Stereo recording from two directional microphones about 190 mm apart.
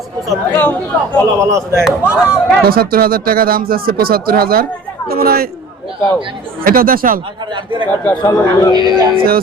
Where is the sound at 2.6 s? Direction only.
50° right (ahead or behind).